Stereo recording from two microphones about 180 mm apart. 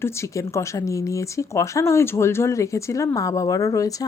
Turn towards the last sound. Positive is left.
turn(degrees=20)  # may be behind; listen again after turning